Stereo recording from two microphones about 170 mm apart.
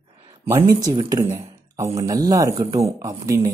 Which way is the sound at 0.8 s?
20° right (ahead or behind).